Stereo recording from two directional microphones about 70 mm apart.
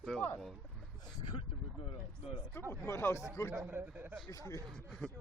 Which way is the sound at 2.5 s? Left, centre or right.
Left.